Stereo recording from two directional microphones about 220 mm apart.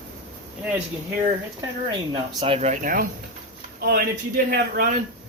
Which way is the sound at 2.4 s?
30° right (ahead or behind).